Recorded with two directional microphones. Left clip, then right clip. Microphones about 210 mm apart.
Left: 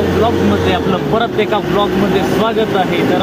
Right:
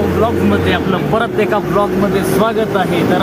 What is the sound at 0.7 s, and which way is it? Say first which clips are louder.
Speech: even; 20° right (ahead or behind).